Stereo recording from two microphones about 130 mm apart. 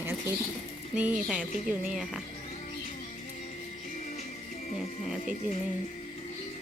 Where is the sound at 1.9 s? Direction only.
5° right (ahead or behind).